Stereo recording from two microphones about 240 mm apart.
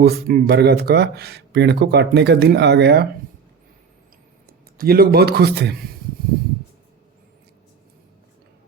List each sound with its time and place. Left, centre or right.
0.0 s speech: right
4.4 s speech: right